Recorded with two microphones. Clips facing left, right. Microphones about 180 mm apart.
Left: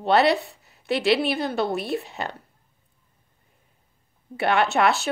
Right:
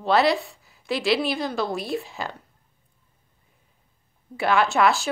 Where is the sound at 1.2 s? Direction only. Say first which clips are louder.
Left 1 dB; 60° left (ahead or behind).